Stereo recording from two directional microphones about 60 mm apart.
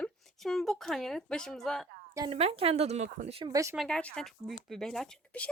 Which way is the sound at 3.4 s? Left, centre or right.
Right.